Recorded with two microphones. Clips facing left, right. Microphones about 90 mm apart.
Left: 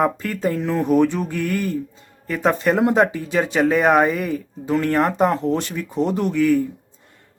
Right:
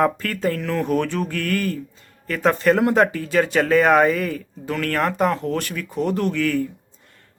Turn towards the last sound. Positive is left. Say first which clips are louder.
# left 3 dB
turn(degrees=15)  # may be behind; listen again after turning